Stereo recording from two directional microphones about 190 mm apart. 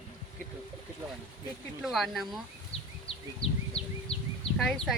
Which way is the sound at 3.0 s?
30° left (ahead or behind).